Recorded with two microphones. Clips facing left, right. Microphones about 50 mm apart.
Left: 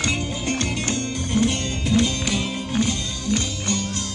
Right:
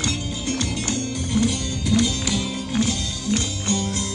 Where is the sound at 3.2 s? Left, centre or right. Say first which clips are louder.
Even; left.